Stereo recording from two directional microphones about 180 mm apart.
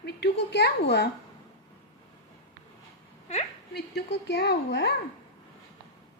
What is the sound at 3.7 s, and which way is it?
A woman's voice, 65° left (ahead or behind).